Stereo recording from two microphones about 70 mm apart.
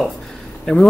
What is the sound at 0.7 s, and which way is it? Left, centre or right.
Speech, centre.